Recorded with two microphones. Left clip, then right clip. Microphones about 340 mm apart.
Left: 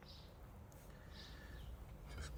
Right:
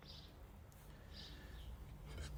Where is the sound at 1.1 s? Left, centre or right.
Centre.